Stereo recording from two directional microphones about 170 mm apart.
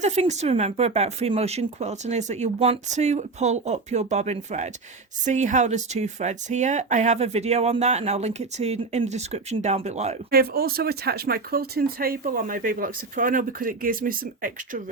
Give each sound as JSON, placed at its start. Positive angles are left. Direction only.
{"t": 0.0, "sound": "speech", "side_deg": -40}
{"t": 10.3, "sound": "speech", "side_deg": -60}